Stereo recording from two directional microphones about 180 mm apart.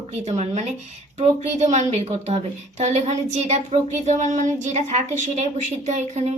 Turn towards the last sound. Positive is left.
turn(degrees=-40)  # may be behind; listen again after turning